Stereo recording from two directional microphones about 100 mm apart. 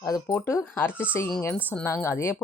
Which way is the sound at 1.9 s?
30° left (ahead or behind).